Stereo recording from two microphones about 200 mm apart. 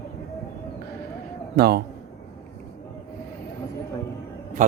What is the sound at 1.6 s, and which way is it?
Speech, 55° right (ahead or behind).